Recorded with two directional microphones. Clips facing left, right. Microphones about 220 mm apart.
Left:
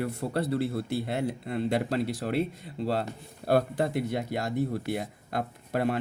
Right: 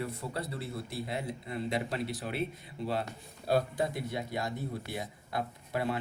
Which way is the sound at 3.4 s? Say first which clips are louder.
Left 4 dB; 60° left (ahead or behind).